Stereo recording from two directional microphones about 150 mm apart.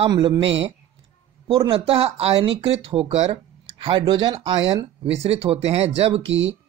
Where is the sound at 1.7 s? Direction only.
40° right (ahead or behind).